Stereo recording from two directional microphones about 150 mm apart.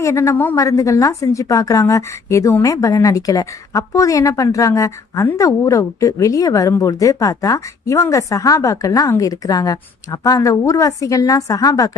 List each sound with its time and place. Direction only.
0.0 s a woman's voice: 20° left (ahead or behind)